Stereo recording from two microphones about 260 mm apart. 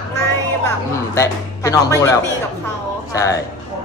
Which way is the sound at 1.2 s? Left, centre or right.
Centre.